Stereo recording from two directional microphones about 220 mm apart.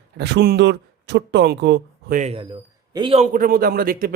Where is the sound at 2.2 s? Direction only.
25° right (ahead or behind).